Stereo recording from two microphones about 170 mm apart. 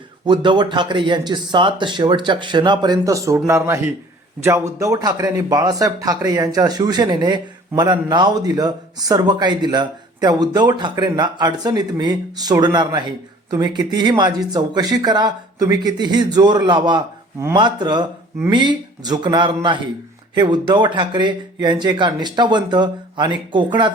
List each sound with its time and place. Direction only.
0.3 s speech: 25° right (ahead or behind)